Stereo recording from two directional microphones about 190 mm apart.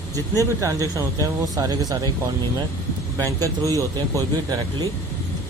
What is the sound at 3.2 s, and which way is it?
A man's voice, 15° right (ahead or behind).